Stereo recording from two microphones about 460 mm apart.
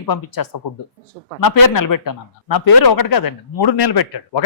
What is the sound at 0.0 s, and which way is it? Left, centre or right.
A man's voice, left.